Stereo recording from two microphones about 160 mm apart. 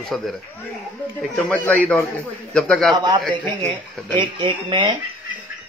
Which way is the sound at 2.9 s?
20° right (ahead or behind).